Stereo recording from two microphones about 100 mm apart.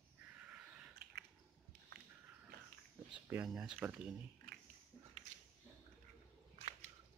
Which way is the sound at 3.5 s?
5° right (ahead or behind).